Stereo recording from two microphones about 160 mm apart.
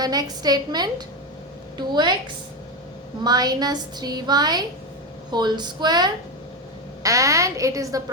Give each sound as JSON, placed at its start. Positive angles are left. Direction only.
{"t": 0.0, "sound": "a woman's voice", "side_deg": -25}
{"t": 3.2, "sound": "a woman's voice", "side_deg": -25}